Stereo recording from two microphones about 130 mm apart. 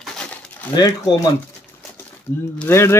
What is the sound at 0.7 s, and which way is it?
Speech, 30° left (ahead or behind).